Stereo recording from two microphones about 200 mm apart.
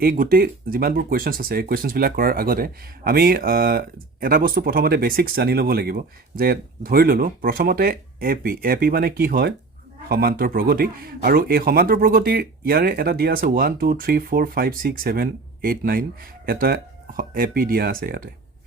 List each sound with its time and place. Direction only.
0.0 s speech: 45° right (ahead or behind)